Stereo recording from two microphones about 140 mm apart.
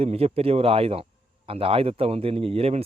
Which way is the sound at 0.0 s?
45° right (ahead or behind).